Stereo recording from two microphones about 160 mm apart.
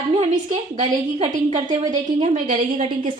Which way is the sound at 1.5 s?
50° right (ahead or behind).